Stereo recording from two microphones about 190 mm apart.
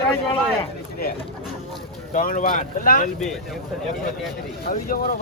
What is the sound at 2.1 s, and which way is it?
Speech, 45° left (ahead or behind).